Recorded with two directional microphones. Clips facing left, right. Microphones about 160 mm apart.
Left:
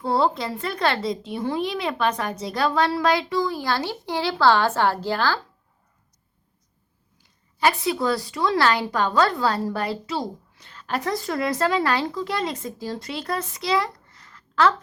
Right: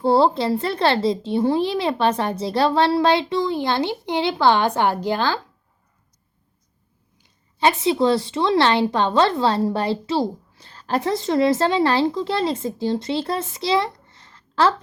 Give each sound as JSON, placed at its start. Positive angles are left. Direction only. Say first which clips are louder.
{"t": 0.0, "sound": "speech", "louder": "right 5 dB", "side_deg": -30}
{"t": 7.2, "sound": "speech", "louder": "right 2 dB", "side_deg": -20}